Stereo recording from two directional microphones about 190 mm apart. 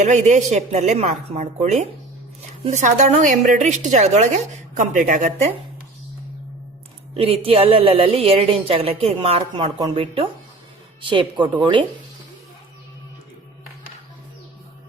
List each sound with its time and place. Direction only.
0.0 s a woman's voice: 40° right (ahead or behind)
7.1 s a woman's voice: 30° right (ahead or behind)